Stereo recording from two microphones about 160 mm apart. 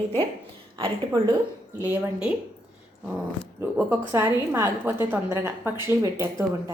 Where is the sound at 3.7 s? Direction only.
15° right (ahead or behind).